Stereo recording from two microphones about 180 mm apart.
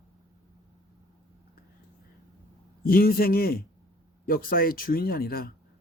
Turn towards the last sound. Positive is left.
turn(degrees=55)  # may be behind; listen again after turning